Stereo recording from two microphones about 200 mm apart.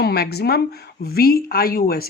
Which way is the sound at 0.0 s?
55° left (ahead or behind).